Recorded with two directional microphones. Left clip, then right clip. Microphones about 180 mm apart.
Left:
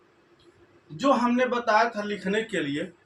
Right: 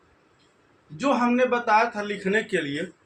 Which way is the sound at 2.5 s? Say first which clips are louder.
Right 3 dB; 40° right (ahead or behind).